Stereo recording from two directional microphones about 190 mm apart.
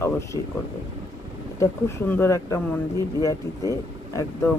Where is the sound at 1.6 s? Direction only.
10° left (ahead or behind).